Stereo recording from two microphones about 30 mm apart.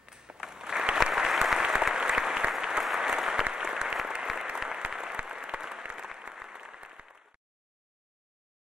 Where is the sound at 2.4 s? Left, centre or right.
Right.